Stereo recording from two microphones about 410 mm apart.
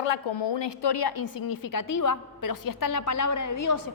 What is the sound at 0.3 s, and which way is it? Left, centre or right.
A woman's voice, left.